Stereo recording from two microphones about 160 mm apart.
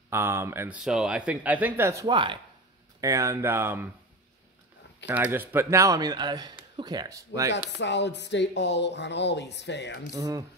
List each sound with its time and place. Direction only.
0.1 s speech: 15° right (ahead or behind)
0.7 s speech: 5° right (ahead or behind)
2.0 s speech: 30° right (ahead or behind)
3.0 s speech: 20° right (ahead or behind)
5.0 s speech: 10° right (ahead or behind)
7.5 s speech: 90° left
10.1 s speech: 20° right (ahead or behind)